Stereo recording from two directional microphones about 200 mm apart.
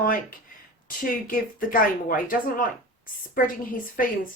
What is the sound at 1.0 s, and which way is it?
Speech, 45° left (ahead or behind).